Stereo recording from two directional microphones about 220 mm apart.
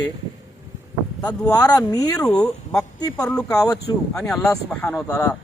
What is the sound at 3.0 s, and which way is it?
Speech, 15° left (ahead or behind).